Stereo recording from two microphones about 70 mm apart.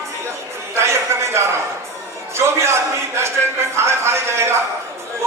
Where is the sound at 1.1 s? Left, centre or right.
Right.